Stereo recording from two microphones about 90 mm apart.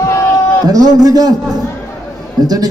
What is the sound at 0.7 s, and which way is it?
Speech, 45° right (ahead or behind).